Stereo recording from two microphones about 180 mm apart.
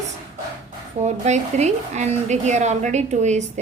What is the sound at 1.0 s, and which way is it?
Speech, 40° right (ahead or behind).